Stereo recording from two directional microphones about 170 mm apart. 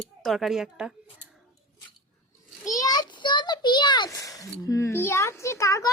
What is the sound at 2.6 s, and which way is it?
A child's voice, 20° left (ahead or behind).